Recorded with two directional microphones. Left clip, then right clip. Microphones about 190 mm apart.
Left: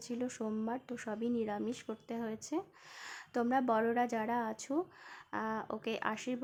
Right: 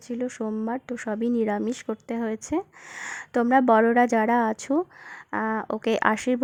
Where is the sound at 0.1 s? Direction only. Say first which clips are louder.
Right 10 dB; 30° right (ahead or behind).